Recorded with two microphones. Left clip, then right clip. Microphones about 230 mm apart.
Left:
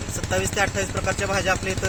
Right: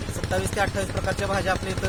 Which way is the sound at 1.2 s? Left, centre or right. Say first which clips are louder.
Left 2 dB; centre.